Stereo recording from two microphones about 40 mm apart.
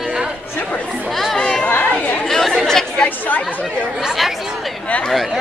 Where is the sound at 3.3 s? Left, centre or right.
Left.